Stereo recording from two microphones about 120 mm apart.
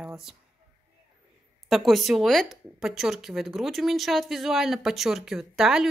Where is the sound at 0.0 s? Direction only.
5° right (ahead or behind).